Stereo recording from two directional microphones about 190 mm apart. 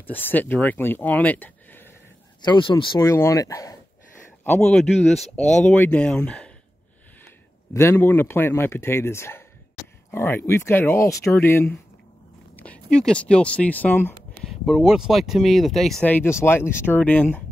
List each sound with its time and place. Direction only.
0.0 s speech: 10° left (ahead or behind)
2.4 s speech: 25° left (ahead or behind)
4.5 s speech: 5° left (ahead or behind)
7.7 s speech: 15° left (ahead or behind)
14.4 s speech: 5° right (ahead or behind)